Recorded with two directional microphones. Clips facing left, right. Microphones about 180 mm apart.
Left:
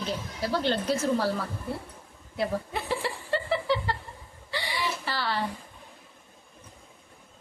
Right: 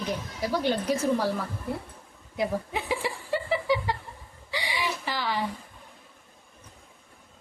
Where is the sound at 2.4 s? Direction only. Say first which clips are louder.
Right 1 dB; 15° right (ahead or behind).